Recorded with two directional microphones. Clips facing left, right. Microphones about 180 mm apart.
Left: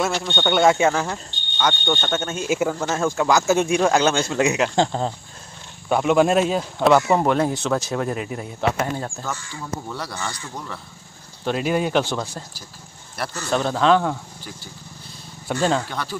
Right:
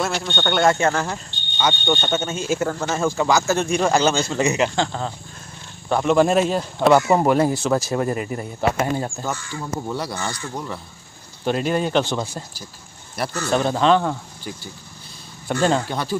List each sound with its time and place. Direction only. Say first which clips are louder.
0.0 s speech: left 1 dB; centre (ahead or behind)
4.7 s speech: left 3 dB; 35° left (ahead or behind)
5.9 s speech: even; 5° left (ahead or behind); by 10.8 s 15° right (ahead or behind)
11.4 s speech: right 1 dB; 5° left (ahead or behind)
13.5 s speech: even; centre (ahead or behind)
15.5 s speech: right 2 dB; 5° left (ahead or behind)
15.9 s speech: right 5 dB; 25° right (ahead or behind)